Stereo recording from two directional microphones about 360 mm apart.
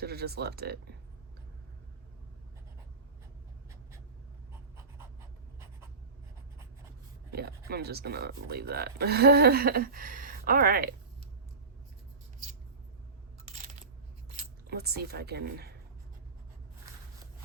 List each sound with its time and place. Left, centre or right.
0.0 s speech: right
7.3 s speech: right
14.3 s speech: right